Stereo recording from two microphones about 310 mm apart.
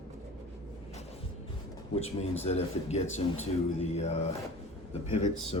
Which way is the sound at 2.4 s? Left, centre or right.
Left.